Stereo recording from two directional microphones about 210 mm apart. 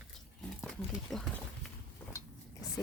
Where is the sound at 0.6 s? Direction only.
Centre (ahead or behind).